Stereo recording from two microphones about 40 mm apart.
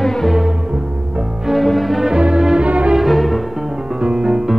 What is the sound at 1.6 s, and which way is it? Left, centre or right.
Music, centre.